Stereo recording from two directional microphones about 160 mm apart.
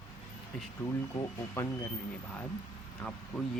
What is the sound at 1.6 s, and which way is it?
Speech, 15° left (ahead or behind).